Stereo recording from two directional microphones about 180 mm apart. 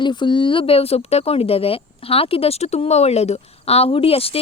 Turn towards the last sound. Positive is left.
turn(degrees=30)  # may be behind; listen again after turning